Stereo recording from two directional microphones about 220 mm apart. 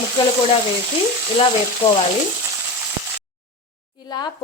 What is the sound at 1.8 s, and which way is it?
Speech, 25° left (ahead or behind).